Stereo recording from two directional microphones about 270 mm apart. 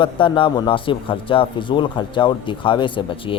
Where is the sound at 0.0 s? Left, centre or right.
Centre.